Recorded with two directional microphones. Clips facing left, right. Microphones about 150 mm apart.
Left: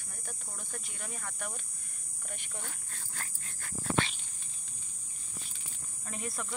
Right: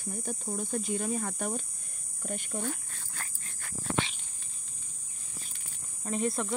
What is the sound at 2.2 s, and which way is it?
Speech, 40° right (ahead or behind).